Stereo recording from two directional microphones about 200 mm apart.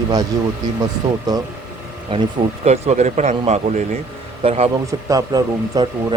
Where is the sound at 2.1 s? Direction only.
25° right (ahead or behind).